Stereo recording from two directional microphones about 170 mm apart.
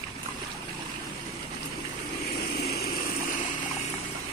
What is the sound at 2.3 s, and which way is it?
Vehicle, 65° left (ahead or behind).